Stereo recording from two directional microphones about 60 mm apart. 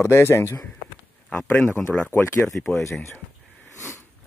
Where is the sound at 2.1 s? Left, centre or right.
Left.